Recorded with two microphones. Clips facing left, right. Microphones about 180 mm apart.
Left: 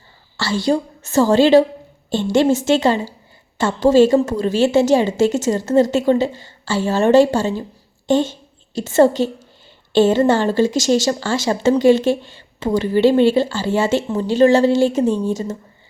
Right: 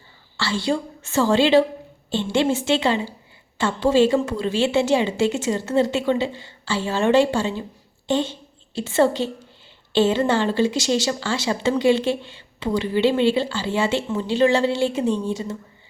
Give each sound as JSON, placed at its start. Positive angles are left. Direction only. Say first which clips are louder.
{"t": 0.3, "sound": "a woman's voice", "louder": "left 5 dB", "side_deg": 45}